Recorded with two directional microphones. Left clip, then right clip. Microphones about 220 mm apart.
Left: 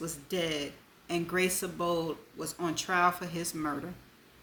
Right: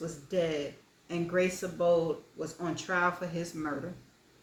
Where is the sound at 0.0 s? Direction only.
55° left (ahead or behind).